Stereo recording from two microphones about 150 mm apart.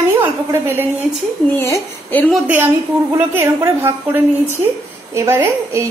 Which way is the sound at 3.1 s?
15° right (ahead or behind).